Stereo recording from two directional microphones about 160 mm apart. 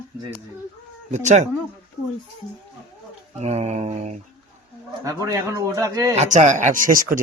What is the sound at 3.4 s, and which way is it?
Mantra, 45° right (ahead or behind).